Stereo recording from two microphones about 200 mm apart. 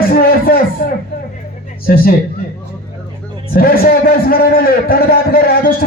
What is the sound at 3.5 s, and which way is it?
A man's voice, 50° left (ahead or behind).